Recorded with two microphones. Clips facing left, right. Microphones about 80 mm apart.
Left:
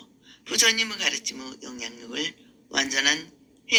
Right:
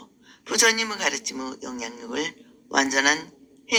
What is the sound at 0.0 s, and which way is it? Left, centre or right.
A man's voice, right.